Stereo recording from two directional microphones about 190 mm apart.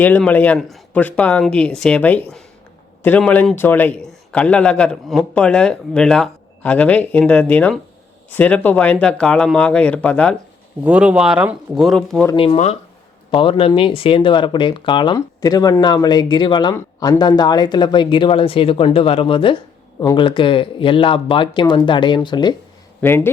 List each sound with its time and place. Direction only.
0.0 s a man's voice: 10° left (ahead or behind)
10.8 s speech: 5° right (ahead or behind)
12.4 s speech: 30° left (ahead or behind)
23.0 s a man's voice: 10° left (ahead or behind)